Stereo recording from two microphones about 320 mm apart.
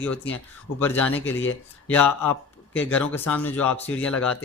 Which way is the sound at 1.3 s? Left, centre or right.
Left.